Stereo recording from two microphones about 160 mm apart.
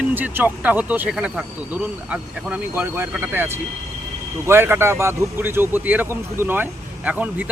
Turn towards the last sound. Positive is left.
turn(degrees=-10)  # may be behind; listen again after turning